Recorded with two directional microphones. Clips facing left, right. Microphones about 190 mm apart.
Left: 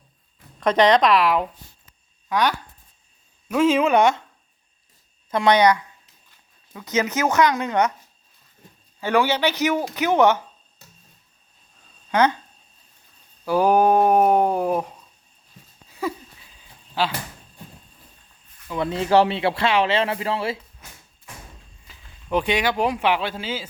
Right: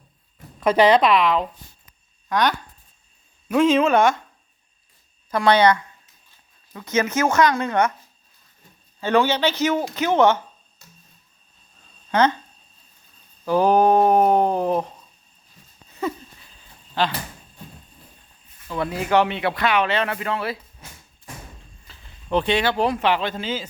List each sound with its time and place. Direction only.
0.6 s speech: 5° right (ahead or behind); by 4.2 s 20° left (ahead or behind)
5.3 s speech: 20° left (ahead or behind)
9.0 s speech: 15° left (ahead or behind)
12.1 s speech: 15° left (ahead or behind)
13.4 s a sound: 10° left (ahead or behind)
18.7 s a man's voice: 25° left (ahead or behind)
21.8 s a sound: 10° left (ahead or behind)
22.8 s speech: 10° left (ahead or behind)